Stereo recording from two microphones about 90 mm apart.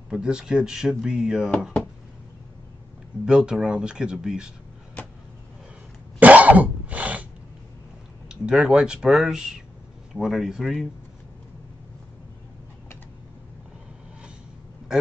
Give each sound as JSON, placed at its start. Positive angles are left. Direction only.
{"t": 0.1, "sound": "speech", "side_deg": -10}
{"t": 3.3, "sound": "speech", "side_deg": -5}
{"t": 5.0, "sound": "vehicle", "side_deg": 20}
{"t": 6.1, "sound": "cough", "side_deg": -15}
{"t": 8.3, "sound": "speech", "side_deg": -10}